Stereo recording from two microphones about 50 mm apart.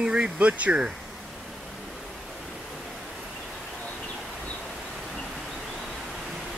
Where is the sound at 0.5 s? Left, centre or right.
Right.